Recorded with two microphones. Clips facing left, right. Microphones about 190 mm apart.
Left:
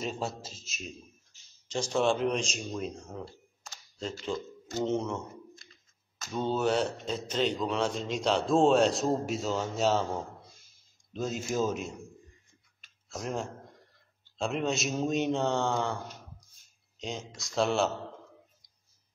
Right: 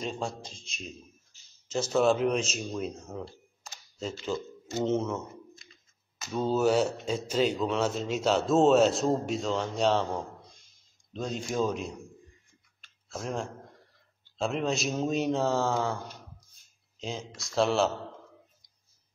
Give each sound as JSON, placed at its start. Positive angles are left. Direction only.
{"t": 0.0, "sound": "speech", "side_deg": 5}
{"t": 6.2, "sound": "speech", "side_deg": -5}
{"t": 12.8, "sound": "a sound", "side_deg": 0}
{"t": 14.4, "sound": "speech", "side_deg": 0}